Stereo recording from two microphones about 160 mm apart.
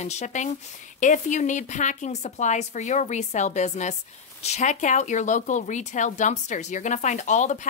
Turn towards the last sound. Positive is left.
turn(degrees=50)  # may be behind; listen again after turning